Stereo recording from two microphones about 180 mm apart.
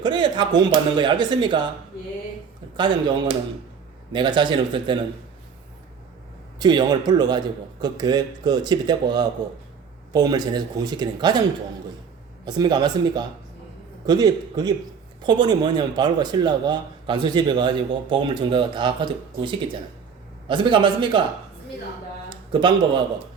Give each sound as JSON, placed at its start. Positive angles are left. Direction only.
{"t": 0.0, "sound": "a man's voice", "side_deg": -25}
{"t": 2.7, "sound": "a man's voice", "side_deg": -25}
{"t": 6.6, "sound": "a man's voice", "side_deg": -25}
{"t": 12.5, "sound": "a man's voice", "side_deg": -25}